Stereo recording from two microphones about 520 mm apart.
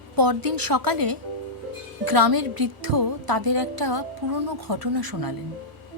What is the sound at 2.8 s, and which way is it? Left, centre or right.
Music, right.